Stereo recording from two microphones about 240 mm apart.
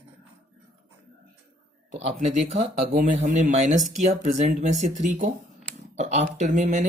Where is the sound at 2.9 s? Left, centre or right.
Right.